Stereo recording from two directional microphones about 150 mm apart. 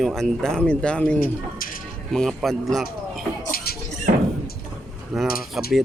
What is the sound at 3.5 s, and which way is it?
Rodents, 90° left.